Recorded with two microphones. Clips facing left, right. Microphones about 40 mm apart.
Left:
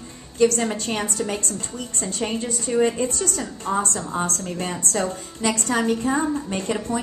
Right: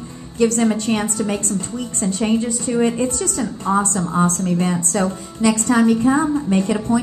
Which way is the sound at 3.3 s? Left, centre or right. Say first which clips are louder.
Right 5 dB; right.